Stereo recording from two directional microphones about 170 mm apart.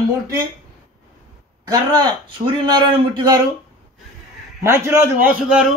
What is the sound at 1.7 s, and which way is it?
A man's voice, 25° right (ahead or behind).